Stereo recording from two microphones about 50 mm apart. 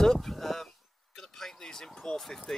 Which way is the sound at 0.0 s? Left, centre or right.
Centre.